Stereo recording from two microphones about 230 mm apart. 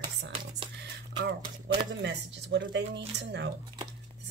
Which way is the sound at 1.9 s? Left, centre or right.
Right.